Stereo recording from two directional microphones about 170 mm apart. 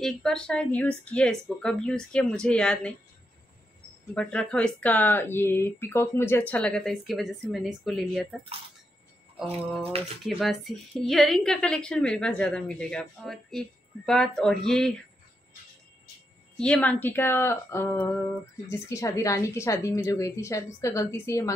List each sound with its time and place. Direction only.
0.0 s a woman's voice: 5° left (ahead or behind)
4.1 s speech: 5° left (ahead or behind)
9.4 s a woman's voice: 5° left (ahead or behind)
16.5 s speech: 5° left (ahead or behind)